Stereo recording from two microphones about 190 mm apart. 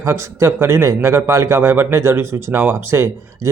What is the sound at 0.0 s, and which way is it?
A man's voice, 15° right (ahead or behind).